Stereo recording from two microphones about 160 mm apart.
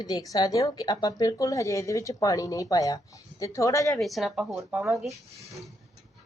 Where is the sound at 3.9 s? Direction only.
Centre (ahead or behind).